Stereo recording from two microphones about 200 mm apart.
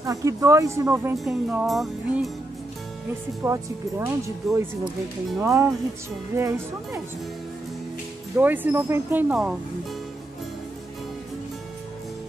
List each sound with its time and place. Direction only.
0.0 s speech: 15° right (ahead or behind)
1.1 s music: centre (ahead or behind)
3.4 s speech: 15° right (ahead or behind)
4.4 s music: centre (ahead or behind)
5.4 s speech: 15° right (ahead or behind)
8.4 s speech: 10° right (ahead or behind)